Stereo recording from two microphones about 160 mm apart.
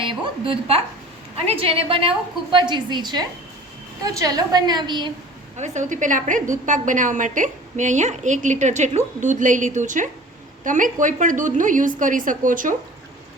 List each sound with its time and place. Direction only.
0.0 s a woman's voice: 30° right (ahead or behind)
5.5 s a woman's voice: 45° right (ahead or behind)